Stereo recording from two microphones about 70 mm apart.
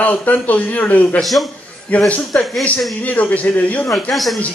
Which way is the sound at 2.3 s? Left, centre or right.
Centre.